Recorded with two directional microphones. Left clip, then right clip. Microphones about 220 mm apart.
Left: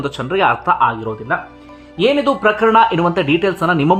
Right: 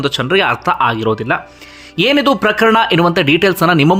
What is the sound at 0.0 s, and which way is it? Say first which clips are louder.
Speech: right 2 dB; 10° right (ahead or behind).